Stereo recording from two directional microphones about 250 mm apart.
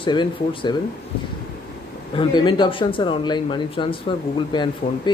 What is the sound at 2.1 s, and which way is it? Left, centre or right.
Speech, centre.